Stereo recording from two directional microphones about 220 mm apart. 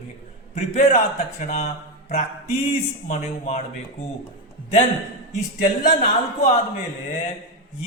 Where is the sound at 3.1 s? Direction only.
35° left (ahead or behind).